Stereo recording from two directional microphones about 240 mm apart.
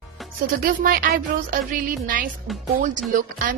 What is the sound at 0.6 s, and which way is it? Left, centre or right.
A woman's voice, right.